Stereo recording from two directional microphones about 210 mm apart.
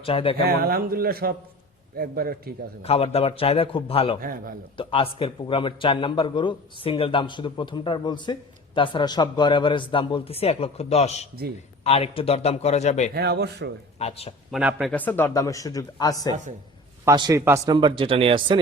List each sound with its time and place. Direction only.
0.0 s a man's voice: 25° left (ahead or behind)
0.4 s a man's voice: 45° right (ahead or behind)
2.8 s a man's voice: 30° left (ahead or behind)
4.2 s a man's voice: 45° right (ahead or behind)
4.8 s a man's voice: 25° left (ahead or behind)
13.1 s a man's voice: 50° right (ahead or behind)
14.0 s a man's voice: 30° left (ahead or behind)
14.5 s speech: 5° right (ahead or behind)
14.9 s speech: 10° left (ahead or behind)
17.1 s speech: 15° right (ahead or behind)